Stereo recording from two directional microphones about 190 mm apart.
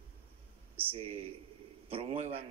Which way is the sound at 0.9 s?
30° right (ahead or behind).